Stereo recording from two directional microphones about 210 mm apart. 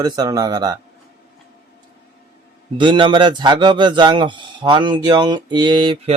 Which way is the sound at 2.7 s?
20° right (ahead or behind).